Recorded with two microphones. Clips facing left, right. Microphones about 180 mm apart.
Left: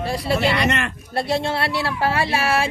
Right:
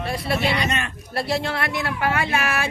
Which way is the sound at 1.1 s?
25° left (ahead or behind).